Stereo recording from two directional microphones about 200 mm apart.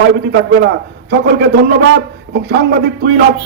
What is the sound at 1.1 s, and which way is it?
A man's voice, 55° right (ahead or behind).